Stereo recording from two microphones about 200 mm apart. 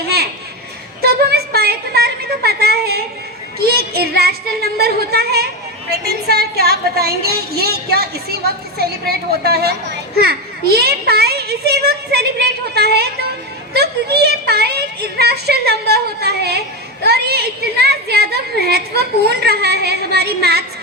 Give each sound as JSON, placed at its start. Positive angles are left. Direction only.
{"t": 1.0, "sound": "a woman's voice", "side_deg": -50}